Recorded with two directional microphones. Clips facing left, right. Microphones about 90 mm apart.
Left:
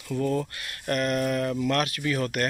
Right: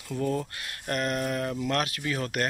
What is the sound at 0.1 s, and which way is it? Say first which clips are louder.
Speech: left 3 dB; centre (ahead or behind).